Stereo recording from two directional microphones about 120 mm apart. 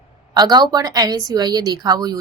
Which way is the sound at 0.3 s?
35° right (ahead or behind).